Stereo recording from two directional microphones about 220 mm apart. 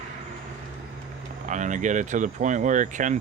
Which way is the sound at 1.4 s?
35° right (ahead or behind).